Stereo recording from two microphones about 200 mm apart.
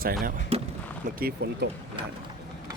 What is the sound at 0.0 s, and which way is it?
Speech, 45° right (ahead or behind).